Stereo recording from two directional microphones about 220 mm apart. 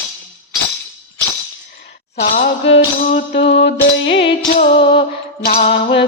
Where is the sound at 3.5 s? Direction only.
50° left (ahead or behind).